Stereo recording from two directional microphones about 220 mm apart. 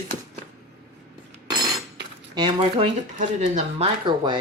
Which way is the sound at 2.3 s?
20° right (ahead or behind).